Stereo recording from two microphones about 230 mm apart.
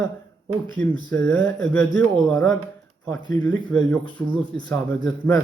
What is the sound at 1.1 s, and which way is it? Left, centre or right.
A man's voice, centre.